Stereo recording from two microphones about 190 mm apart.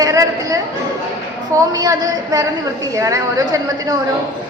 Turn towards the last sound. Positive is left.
turn(degrees=-20)  # may be behind; listen again after turning